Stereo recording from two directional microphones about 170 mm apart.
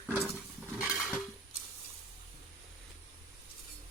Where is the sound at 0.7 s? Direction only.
5° right (ahead or behind).